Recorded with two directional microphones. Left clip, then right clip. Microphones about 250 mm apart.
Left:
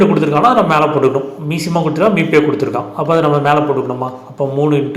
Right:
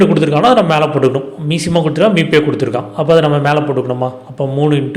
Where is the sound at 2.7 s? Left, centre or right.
Right.